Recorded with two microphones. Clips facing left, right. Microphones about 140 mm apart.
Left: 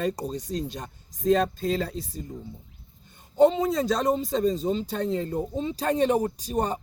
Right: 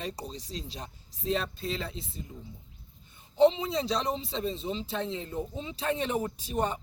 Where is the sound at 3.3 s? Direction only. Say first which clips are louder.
Left 4 dB; 45° left (ahead or behind).